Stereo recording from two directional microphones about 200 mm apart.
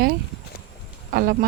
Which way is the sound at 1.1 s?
45° right (ahead or behind).